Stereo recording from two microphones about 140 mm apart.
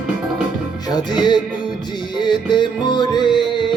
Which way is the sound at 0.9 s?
30° left (ahead or behind).